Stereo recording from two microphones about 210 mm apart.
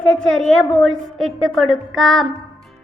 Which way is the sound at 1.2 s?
80° right.